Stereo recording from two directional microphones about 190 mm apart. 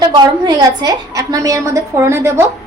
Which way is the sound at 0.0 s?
20° right (ahead or behind).